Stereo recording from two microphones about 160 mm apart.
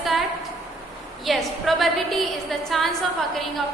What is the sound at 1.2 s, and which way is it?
A woman's voice, centre (ahead or behind).